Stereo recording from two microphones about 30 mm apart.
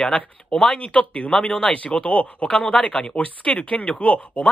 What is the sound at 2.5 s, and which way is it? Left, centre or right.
Speech, left.